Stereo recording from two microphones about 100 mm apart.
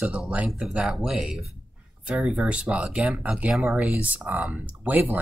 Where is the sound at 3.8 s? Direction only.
15° right (ahead or behind).